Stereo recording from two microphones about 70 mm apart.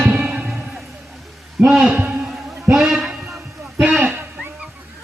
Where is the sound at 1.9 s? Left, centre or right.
Right.